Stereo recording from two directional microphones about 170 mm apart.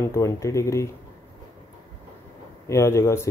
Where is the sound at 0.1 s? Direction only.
15° left (ahead or behind).